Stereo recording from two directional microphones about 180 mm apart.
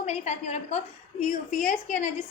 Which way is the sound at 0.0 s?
40° left (ahead or behind).